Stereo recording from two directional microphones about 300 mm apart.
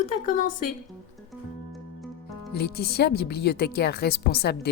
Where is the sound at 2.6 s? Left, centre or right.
Left.